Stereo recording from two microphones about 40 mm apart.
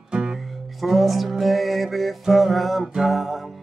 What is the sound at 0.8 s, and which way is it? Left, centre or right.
Music, centre.